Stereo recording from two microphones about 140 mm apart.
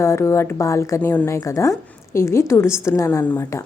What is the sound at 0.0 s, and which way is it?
A woman's voice, 20° left (ahead or behind).